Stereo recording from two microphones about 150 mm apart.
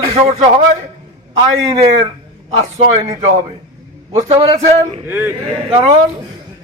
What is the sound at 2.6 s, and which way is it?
Speech, 40° right (ahead or behind).